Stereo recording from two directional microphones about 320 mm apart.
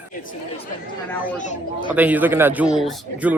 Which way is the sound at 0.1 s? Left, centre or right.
Left.